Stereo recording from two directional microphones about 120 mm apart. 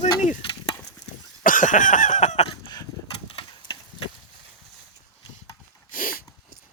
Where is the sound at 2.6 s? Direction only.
35° left (ahead or behind).